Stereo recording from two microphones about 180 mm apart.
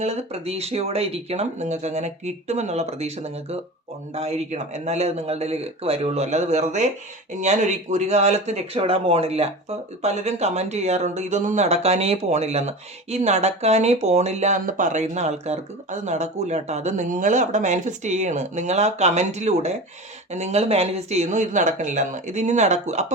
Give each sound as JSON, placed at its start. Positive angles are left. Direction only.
{"t": 0.0, "sound": "speech", "side_deg": -35}
{"t": 4.1, "sound": "speech", "side_deg": -35}